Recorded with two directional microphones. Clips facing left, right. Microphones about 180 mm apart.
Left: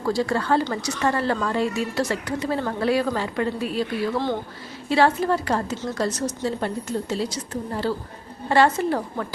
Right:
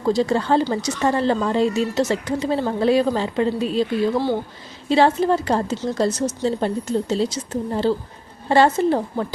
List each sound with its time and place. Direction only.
0.0 s speech: 20° right (ahead or behind)